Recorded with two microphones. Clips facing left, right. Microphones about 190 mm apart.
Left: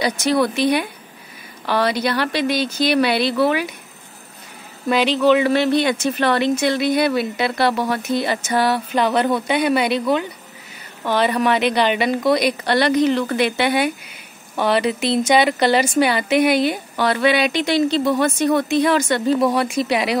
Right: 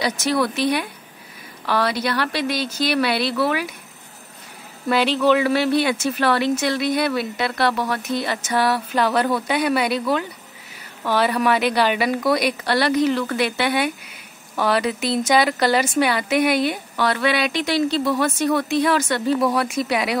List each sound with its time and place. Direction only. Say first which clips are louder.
0.0 s speech: left 3 dB; centre (ahead or behind)
4.9 s speech: left 2 dB; 5° right (ahead or behind)
8.9 s speech: left 2 dB; 20° left (ahead or behind)
9.5 s speech: left 2 dB; centre (ahead or behind)
11.1 s speech: left 1 dB; 5° right (ahead or behind)
15.3 s speech: left 1 dB; 25° left (ahead or behind)
15.7 s speech: left 2 dB; centre (ahead or behind)